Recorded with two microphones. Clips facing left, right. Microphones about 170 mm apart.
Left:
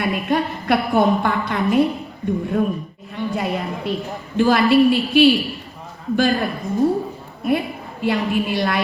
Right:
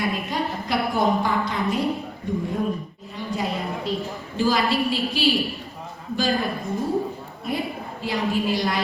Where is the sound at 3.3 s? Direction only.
60° left (ahead or behind).